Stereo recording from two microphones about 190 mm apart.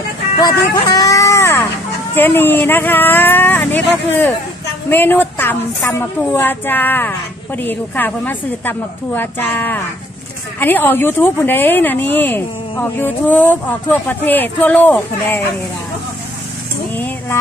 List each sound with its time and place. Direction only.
0.4 s music: 20° left (ahead or behind)
2.1 s a woman's voice: 10° left (ahead or behind)
16.9 s a sound: 10° left (ahead or behind)